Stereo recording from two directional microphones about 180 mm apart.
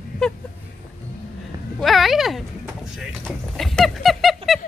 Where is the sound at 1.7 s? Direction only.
Centre (ahead or behind).